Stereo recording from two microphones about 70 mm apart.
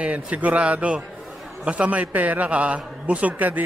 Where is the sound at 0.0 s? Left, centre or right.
Centre.